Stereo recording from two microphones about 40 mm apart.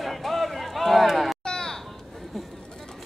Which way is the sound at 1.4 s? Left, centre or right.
Centre.